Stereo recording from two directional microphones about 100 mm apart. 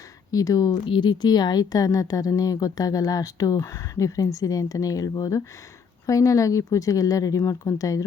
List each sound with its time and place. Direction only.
0.3 s a woman's voice: 35° left (ahead or behind)
0.9 s a woman's voice: 50° left (ahead or behind); by 8.0 s 35° left (ahead or behind)